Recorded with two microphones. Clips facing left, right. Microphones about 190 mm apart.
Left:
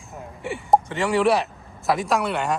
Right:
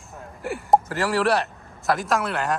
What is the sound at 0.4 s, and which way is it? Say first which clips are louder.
Speech: even; centre (ahead or behind).